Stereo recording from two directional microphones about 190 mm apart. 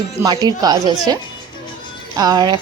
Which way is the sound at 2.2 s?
20° right (ahead or behind).